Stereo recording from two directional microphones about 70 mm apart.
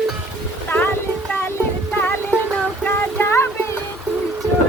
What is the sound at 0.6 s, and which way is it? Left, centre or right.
Music, left.